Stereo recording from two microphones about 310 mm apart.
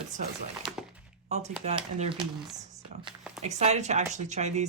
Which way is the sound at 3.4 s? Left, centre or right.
Right.